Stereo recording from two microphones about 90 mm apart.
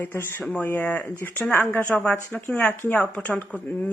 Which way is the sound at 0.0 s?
25° left (ahead or behind).